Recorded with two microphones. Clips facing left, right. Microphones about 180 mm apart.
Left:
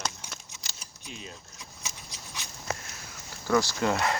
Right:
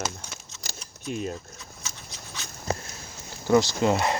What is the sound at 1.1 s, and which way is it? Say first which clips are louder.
Speech: right 13 dB; 50° right (ahead or behind).